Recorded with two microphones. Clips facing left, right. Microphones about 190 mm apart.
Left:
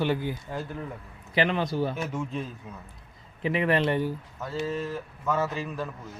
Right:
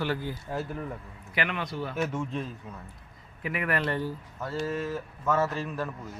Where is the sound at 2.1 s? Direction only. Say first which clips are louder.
Even; centre (ahead or behind).